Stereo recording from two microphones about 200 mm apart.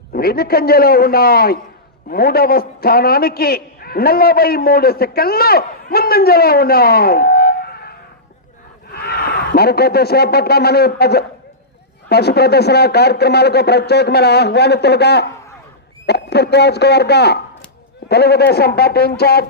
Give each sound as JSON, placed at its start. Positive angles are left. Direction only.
{"t": 0.1, "sound": "a man's voice", "side_deg": 50}